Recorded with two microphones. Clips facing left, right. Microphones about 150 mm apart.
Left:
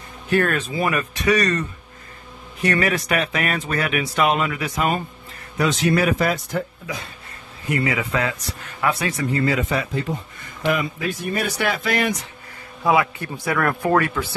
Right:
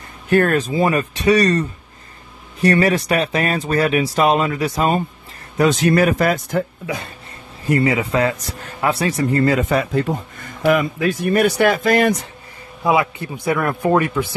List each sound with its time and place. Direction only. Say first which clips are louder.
0.3 s speech: right 5 dB; 40° right (ahead or behind)
5.6 s speech: right 5 dB; 50° right (ahead or behind)
7.6 s speech: right 6 dB; 35° right (ahead or behind)
12.8 s speech: right 1 dB; 20° right (ahead or behind)